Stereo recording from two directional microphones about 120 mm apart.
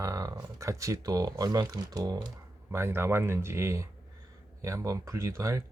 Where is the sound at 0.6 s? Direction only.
25° right (ahead or behind).